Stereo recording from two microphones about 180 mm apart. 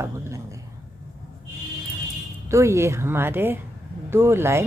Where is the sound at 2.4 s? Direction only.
15° right (ahead or behind).